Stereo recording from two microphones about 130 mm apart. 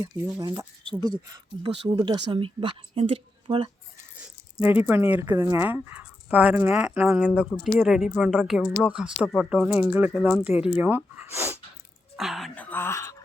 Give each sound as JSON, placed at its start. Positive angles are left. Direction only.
{"t": 0.0, "sound": "speech", "side_deg": -25}
{"t": 4.6, "sound": "a woman's voice", "side_deg": -15}
{"t": 10.8, "sound": "a woman's voice", "side_deg": -15}
{"t": 12.1, "sound": "speech", "side_deg": 0}
{"t": 12.5, "sound": "speech", "side_deg": 15}